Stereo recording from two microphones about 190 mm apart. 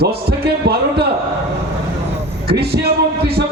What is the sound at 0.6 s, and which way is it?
Speech, 60° right (ahead or behind).